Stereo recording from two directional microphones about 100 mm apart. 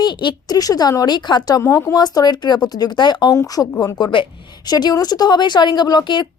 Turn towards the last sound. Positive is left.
turn(degrees=45)  # may be behind; listen again after turning